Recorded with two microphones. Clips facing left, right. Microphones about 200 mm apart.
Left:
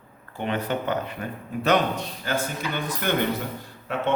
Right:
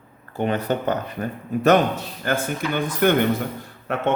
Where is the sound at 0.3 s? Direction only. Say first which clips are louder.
Right 4 dB; 40° right (ahead or behind).